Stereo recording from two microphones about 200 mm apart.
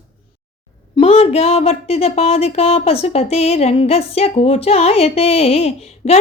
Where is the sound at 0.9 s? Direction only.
30° left (ahead or behind).